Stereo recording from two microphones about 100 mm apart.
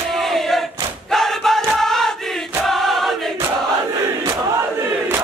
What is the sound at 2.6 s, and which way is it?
Choir, centre (ahead or behind).